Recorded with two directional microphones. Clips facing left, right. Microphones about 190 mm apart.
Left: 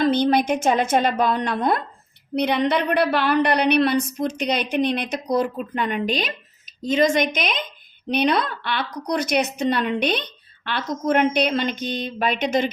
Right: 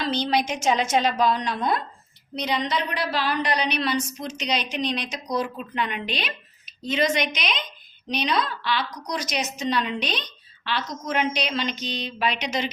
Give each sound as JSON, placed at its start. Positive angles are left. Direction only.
{"t": 0.0, "sound": "a woman's voice", "side_deg": 55}